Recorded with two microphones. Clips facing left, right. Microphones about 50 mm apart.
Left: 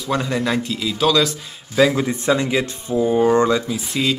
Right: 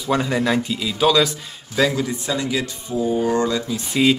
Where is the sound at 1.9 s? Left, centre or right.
Left.